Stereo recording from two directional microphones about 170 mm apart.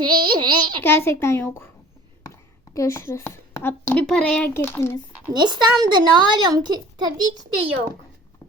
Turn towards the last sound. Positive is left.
turn(degrees=-25)  # may be behind; listen again after turning